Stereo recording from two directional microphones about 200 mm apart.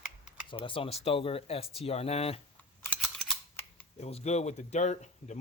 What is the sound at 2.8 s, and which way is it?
Scissors, 5° left (ahead or behind).